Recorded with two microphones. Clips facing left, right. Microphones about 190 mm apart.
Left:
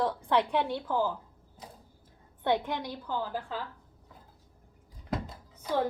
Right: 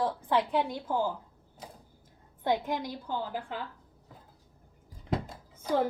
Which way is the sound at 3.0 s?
15° right (ahead or behind).